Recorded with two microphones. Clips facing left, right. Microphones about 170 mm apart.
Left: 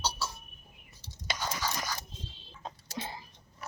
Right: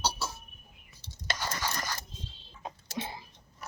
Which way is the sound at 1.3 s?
Centre (ahead or behind).